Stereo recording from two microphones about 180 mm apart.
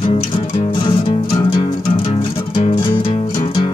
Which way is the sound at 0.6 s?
30° left (ahead or behind).